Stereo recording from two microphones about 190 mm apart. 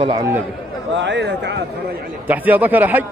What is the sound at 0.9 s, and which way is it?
Speech, 65° right (ahead or behind).